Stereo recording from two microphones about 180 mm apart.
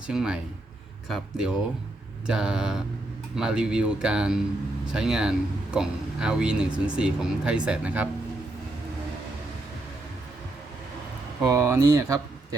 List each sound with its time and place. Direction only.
0.1 s speech: 5° right (ahead or behind)
11.4 s speech: 15° right (ahead or behind)